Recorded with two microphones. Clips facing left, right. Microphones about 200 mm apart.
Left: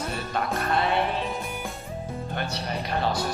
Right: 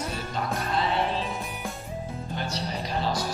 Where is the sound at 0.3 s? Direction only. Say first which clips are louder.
Left 4 dB; 60° left (ahead or behind).